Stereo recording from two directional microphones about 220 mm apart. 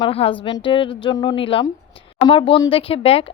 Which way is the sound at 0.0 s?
25° left (ahead or behind).